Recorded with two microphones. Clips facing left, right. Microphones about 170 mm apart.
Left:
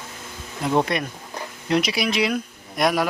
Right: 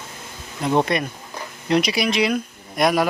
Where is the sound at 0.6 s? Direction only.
Centre (ahead or behind).